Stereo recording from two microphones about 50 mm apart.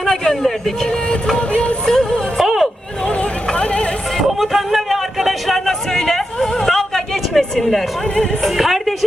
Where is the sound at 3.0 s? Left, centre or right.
Left.